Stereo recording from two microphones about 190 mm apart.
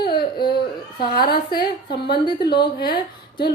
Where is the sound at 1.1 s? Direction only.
55° left (ahead or behind).